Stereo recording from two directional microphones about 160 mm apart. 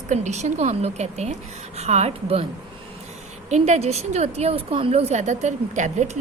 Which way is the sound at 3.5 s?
45° right (ahead or behind).